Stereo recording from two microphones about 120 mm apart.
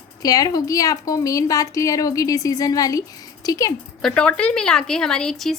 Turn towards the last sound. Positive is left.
turn(degrees=5)  # may be behind; listen again after turning